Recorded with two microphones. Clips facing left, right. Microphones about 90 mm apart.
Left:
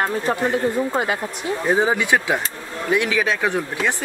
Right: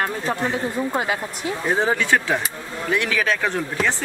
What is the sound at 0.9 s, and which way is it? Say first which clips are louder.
Speech: left 1 dB; centre (ahead or behind).